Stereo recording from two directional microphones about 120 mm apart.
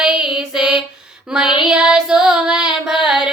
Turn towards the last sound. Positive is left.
turn(degrees=-5)  # may be behind; listen again after turning